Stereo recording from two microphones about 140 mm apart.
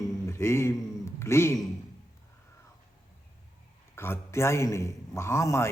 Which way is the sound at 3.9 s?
20° left (ahead or behind).